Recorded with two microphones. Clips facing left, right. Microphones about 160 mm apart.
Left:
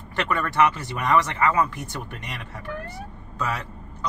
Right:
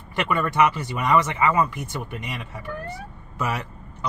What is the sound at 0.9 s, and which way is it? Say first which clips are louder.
Speech: right 1 dB; 5° right (ahead or behind).